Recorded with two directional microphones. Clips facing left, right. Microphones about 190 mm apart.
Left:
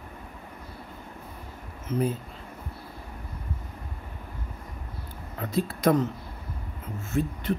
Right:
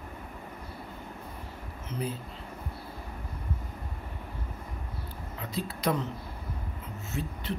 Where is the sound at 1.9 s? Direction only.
50° left (ahead or behind).